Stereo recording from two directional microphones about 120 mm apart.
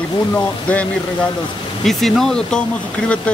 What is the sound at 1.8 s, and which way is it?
Speech, centre (ahead or behind).